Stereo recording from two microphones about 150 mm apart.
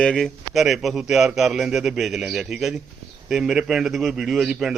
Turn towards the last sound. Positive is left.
turn(degrees=-5)  # may be behind; listen again after turning